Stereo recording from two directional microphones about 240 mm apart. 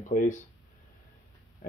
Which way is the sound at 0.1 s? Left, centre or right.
Left.